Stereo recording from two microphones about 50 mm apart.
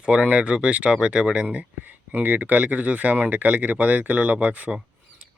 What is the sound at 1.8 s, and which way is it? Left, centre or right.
Speech, right.